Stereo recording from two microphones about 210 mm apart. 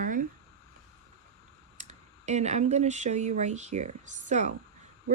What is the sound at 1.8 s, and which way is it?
Speech, 35° right (ahead or behind).